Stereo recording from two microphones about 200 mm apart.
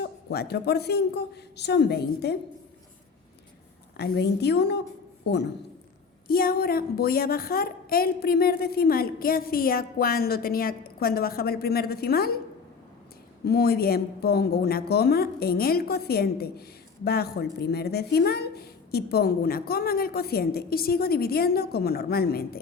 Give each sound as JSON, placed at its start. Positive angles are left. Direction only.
{"t": 0.0, "sound": "a woman's voice", "side_deg": 55}
{"t": 3.9, "sound": "a woman's voice", "side_deg": 55}
{"t": 6.2, "sound": "speech", "side_deg": 45}
{"t": 13.4, "sound": "speech", "side_deg": 50}